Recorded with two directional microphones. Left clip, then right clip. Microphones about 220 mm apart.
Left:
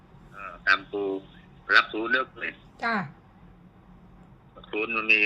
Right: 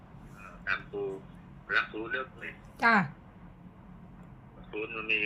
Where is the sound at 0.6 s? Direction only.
50° left (ahead or behind).